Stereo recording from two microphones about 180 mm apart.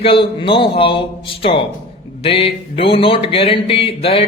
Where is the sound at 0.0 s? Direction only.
30° left (ahead or behind).